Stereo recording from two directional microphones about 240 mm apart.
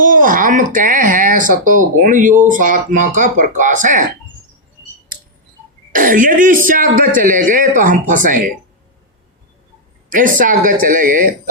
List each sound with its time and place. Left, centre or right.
0.0 s speech: right
5.9 s speech: right
10.1 s speech: right